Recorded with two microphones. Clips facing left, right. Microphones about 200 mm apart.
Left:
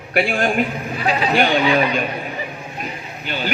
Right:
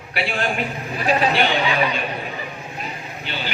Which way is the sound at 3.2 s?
45° left (ahead or behind).